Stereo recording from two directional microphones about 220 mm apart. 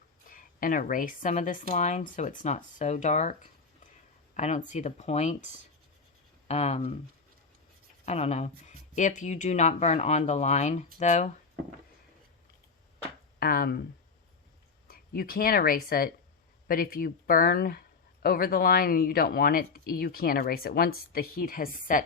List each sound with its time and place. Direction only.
0.3 s speech: 40° left (ahead or behind)
8.0 s speech: 30° left (ahead or behind)
13.4 s speech: 45° left (ahead or behind)
14.8 s speech: 40° left (ahead or behind)